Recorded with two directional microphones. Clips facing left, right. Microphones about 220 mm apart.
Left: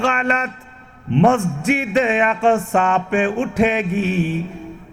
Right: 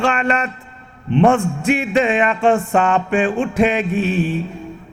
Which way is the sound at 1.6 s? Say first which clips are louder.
Right 1 dB; 15° right (ahead or behind).